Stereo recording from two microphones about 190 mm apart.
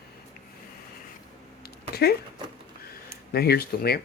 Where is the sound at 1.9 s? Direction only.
55° left (ahead or behind).